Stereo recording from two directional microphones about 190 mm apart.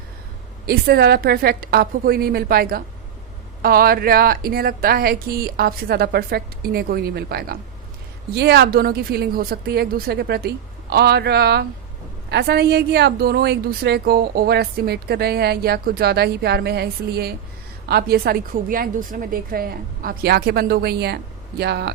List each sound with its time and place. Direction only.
0.7 s a woman's voice: 55° right (ahead or behind)